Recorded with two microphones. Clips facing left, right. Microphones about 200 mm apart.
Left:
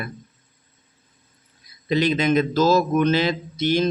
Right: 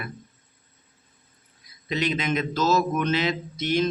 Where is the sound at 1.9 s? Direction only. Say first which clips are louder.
Left 7 dB; 35° left (ahead or behind).